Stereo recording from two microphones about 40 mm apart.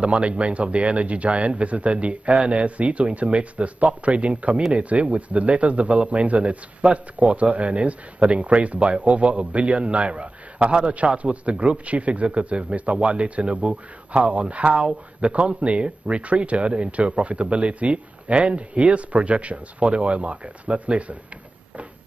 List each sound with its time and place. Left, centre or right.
0.0 s a man's voice: right